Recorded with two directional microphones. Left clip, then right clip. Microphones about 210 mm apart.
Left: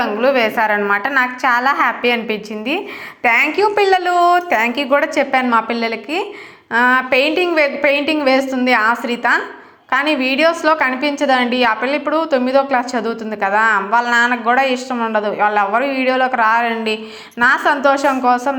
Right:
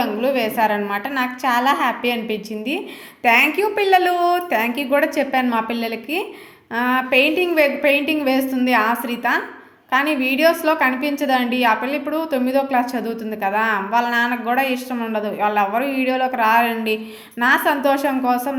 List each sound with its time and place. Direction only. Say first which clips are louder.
0.0 s a woman's voice: left 5 dB; 5° right (ahead or behind)